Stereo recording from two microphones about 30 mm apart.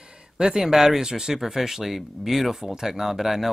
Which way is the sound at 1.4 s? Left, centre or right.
Centre.